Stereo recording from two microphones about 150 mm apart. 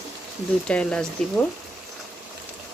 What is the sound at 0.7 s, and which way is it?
Speech, 5° left (ahead or behind).